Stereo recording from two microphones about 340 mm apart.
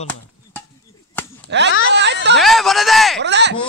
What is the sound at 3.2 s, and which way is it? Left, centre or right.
Speech, right.